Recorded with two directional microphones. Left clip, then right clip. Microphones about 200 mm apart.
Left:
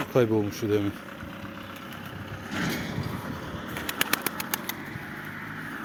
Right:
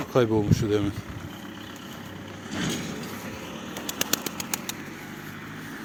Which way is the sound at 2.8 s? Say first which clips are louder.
Even; 25° right (ahead or behind).